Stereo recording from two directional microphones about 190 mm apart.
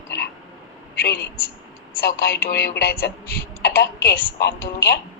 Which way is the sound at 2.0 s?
55° left (ahead or behind).